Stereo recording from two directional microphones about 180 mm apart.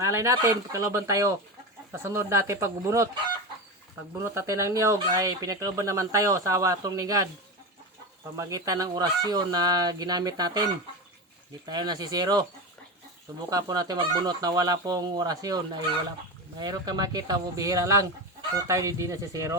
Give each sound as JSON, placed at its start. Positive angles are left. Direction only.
{"t": 0.0, "sound": "speech", "side_deg": -15}
{"t": 4.2, "sound": "speech", "side_deg": -15}
{"t": 8.4, "sound": "speech", "side_deg": -20}
{"t": 11.6, "sound": "speech", "side_deg": -25}
{"t": 13.5, "sound": "speech", "side_deg": -20}